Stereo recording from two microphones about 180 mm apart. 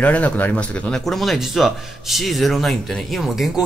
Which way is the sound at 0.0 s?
10° left (ahead or behind).